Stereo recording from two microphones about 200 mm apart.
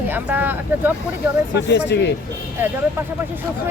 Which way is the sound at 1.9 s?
60° left (ahead or behind).